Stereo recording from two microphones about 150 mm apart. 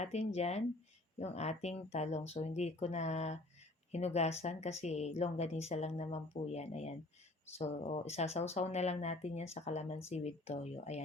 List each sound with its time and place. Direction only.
0.0 s speech: 45° left (ahead or behind)